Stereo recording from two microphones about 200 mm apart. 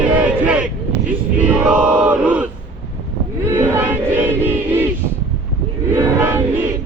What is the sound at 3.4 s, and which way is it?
Battle cry, 10° right (ahead or behind).